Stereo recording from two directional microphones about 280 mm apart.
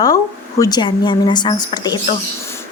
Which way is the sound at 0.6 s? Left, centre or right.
Centre.